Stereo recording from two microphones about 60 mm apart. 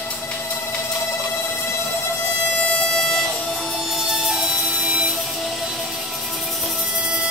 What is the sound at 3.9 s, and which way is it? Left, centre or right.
Music, centre.